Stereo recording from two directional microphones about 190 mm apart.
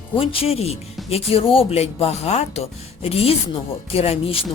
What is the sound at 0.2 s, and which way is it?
Speech, 30° left (ahead or behind).